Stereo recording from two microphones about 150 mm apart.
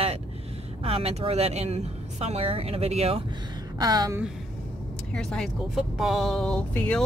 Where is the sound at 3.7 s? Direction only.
25° right (ahead or behind).